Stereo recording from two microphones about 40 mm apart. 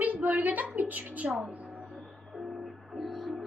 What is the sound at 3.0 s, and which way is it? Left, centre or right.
Music, centre.